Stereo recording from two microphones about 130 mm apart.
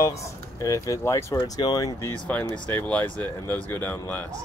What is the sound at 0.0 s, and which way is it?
Speech, 25° left (ahead or behind).